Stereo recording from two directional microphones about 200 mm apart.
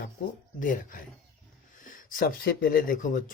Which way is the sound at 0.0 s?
40° left (ahead or behind).